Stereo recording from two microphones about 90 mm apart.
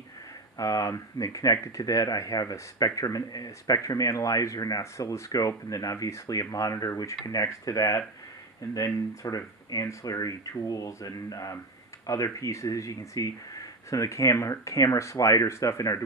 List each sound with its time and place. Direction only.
0.6 s speech: 40° left (ahead or behind)